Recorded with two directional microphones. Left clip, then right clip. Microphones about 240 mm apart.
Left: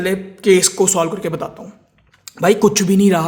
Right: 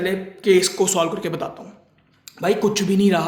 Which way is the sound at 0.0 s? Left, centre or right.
Left.